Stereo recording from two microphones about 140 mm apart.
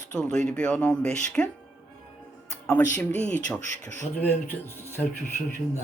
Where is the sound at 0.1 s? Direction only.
5° left (ahead or behind).